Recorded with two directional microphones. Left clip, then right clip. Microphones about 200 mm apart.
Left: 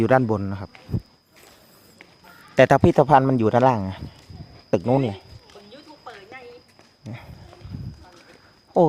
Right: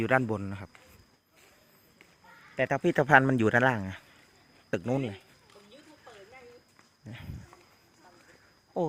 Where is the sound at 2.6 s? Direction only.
25° left (ahead or behind).